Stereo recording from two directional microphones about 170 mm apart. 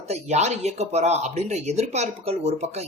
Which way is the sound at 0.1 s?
40° right (ahead or behind).